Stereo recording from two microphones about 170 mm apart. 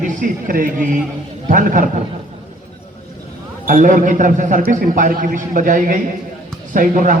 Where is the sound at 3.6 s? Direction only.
55° right (ahead or behind).